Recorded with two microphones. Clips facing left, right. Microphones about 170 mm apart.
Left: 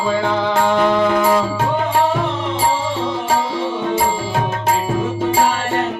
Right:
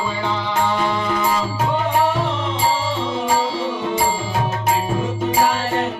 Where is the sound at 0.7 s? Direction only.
50° left (ahead or behind).